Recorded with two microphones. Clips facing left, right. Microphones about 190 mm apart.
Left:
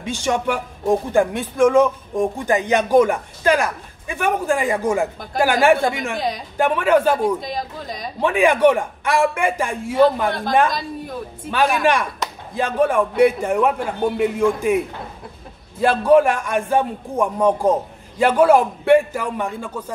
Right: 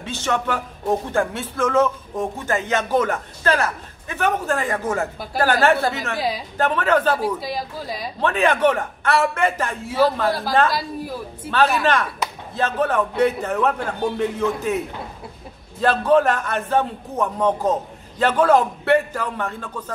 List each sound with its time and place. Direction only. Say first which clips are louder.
0.0 s speech: left 3 dB; 15° left (ahead or behind)
6.1 s speech: even; 5° right (ahead or behind)
6.6 s speech: left 3 dB; 10° left (ahead or behind)
7.2 s speech: left 3 dB; 5° right (ahead or behind)
8.2 s speech: left 3 dB; 10° left (ahead or behind)
10.7 s speech: right 1 dB; 5° right (ahead or behind)
11.5 s speech: left 1 dB; 10° left (ahead or behind)
15.8 s speech: left 3 dB; 10° left (ahead or behind)